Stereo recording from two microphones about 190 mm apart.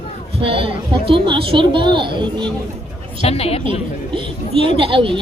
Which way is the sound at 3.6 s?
25° right (ahead or behind).